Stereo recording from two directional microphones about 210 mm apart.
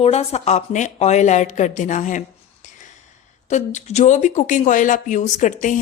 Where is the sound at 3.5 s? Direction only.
35° left (ahead or behind).